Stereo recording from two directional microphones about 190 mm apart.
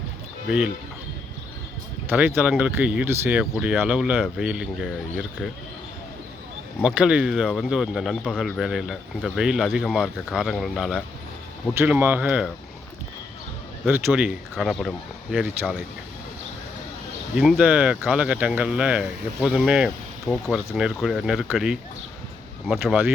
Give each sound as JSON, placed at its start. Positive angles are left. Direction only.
{"t": 2.0, "sound": "speech", "side_deg": -10}
{"t": 6.8, "sound": "speech", "side_deg": -5}
{"t": 11.7, "sound": "speech", "side_deg": -10}
{"t": 13.8, "sound": "speech", "side_deg": -10}
{"t": 17.3, "sound": "speech", "side_deg": 0}